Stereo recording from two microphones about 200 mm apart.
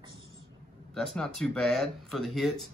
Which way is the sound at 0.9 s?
Centre (ahead or behind).